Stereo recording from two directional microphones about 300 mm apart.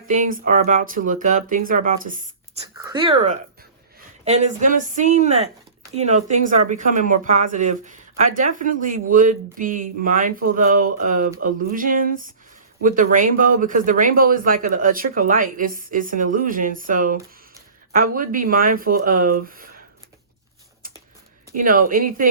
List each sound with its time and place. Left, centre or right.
0.1 s speech: right
2.8 s speech: centre
21.5 s speech: right